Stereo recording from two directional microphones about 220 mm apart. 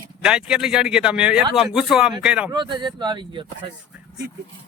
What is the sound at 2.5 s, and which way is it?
Speech, 20° right (ahead or behind).